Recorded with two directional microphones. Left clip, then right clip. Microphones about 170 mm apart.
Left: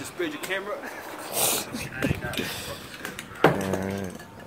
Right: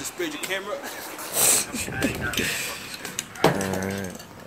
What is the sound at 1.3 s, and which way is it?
Wheeze, centre (ahead or behind).